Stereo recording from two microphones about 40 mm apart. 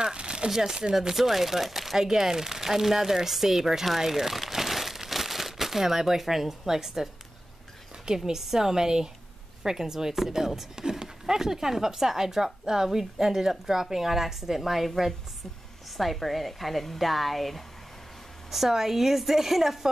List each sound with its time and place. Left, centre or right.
0.0 s crumpling: right
0.5 s speech: centre
8.2 s speech: centre